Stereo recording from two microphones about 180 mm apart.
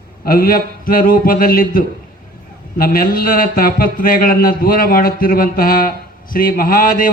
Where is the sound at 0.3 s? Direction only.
55° left (ahead or behind).